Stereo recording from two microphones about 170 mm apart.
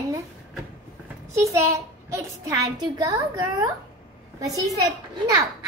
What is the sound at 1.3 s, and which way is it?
A child's voice, 15° right (ahead or behind).